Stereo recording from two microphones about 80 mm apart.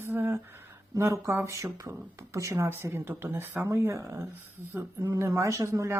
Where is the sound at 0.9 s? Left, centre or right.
Right.